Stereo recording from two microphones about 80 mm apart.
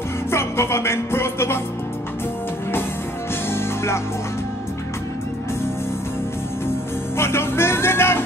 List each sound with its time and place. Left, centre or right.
0.3 s music: left
3.4 s music: left
7.2 s music: left